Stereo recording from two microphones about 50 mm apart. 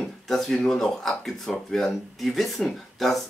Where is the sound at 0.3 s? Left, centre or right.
Centre.